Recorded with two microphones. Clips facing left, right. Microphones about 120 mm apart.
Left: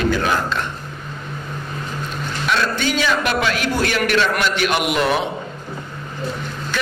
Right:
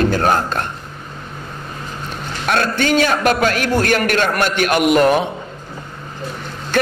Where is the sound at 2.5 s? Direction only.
55° right (ahead or behind).